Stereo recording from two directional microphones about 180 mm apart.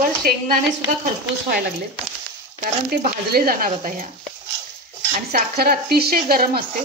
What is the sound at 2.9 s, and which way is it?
Speech, 60° right (ahead or behind).